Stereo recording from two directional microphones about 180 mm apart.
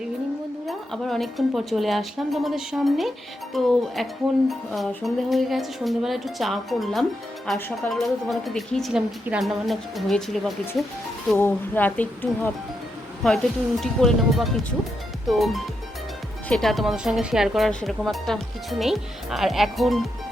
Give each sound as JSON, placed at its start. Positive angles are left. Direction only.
{"t": 0.7, "sound": "speech", "side_deg": 0}
{"t": 11.3, "sound": "a woman's voice", "side_deg": 10}